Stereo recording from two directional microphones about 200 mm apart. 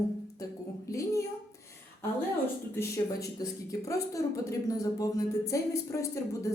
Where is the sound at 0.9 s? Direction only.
15° left (ahead or behind).